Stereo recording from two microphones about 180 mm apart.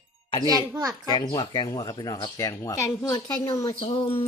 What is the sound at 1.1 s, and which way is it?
Speech, 25° left (ahead or behind).